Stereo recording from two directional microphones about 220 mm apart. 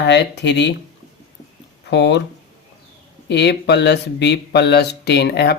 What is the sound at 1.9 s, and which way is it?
Speech, 55° left (ahead or behind).